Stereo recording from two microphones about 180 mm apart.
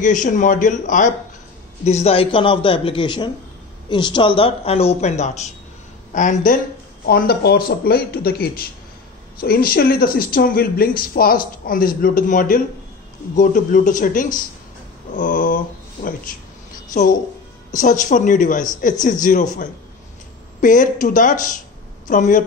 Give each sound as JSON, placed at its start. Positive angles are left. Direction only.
{"t": 0.0, "sound": "a man's voice", "side_deg": 45}
{"t": 7.1, "sound": "speech", "side_deg": 60}
{"t": 15.1, "sound": "a sound", "side_deg": 50}
{"t": 16.9, "sound": "speech", "side_deg": 45}
{"t": 20.6, "sound": "speech", "side_deg": 45}